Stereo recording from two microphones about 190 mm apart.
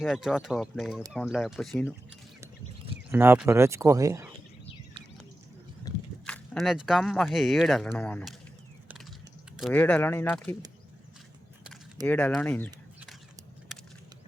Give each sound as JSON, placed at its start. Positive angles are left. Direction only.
{"t": 0.0, "sound": "speech", "side_deg": 0}
{"t": 3.1, "sound": "speech", "side_deg": -10}
{"t": 6.2, "sound": "speech", "side_deg": 5}
{"t": 9.6, "sound": "speech", "side_deg": 5}
{"t": 12.0, "sound": "speech", "side_deg": 10}